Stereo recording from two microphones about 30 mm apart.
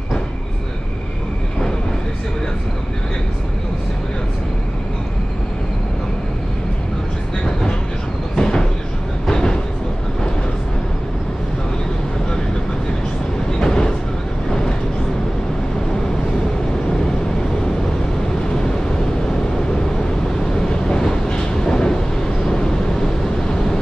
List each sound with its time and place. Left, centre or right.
8.4 s a sound: left
9.2 s train: left
13.5 s train: left
18.5 s vehicle: left
20.5 s train: left
22.5 s vehicle: left